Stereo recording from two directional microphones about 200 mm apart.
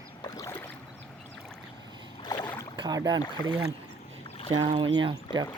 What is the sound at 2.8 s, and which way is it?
Speech, 20° right (ahead or behind).